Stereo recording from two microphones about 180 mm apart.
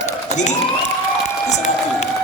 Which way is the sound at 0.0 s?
40° left (ahead or behind).